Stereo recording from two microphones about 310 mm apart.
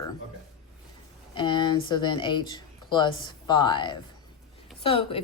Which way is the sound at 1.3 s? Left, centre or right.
Centre.